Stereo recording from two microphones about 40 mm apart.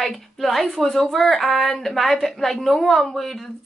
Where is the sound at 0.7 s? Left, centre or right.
Centre.